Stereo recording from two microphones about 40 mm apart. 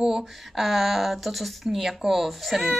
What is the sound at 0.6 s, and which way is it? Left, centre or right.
Speech, centre.